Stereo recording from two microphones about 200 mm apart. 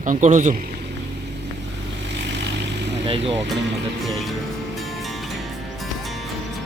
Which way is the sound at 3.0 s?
30° right (ahead or behind).